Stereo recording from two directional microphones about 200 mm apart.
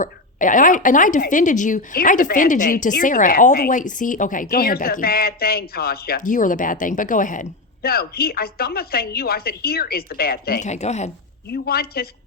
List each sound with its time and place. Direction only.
0.0 s a woman's voice: 40° left (ahead or behind)
10.6 s a woman's voice: 35° left (ahead or behind)
11.5 s speech: 50° left (ahead or behind)